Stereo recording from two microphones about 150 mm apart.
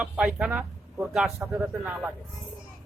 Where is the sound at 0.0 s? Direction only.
5° right (ahead or behind).